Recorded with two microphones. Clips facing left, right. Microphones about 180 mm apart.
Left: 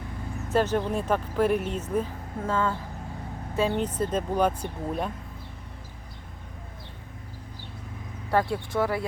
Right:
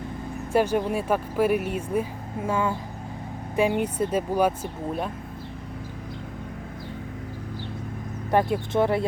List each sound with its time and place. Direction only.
0.5 s speech: 10° right (ahead or behind)
8.3 s speech: 20° right (ahead or behind)